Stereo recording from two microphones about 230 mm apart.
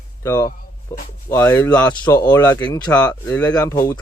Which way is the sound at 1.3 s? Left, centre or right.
Centre.